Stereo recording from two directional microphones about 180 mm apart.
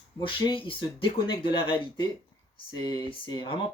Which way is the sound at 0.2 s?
30° left (ahead or behind).